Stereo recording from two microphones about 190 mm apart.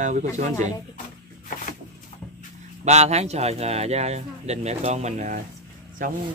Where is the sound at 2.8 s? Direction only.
35° right (ahead or behind).